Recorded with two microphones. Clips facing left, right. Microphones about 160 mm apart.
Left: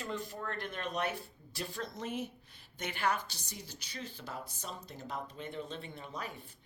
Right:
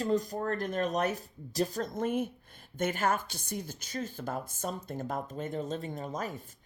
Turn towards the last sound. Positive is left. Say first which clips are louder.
# right 7 dB
turn(degrees=-45)  # may be behind; listen again after turning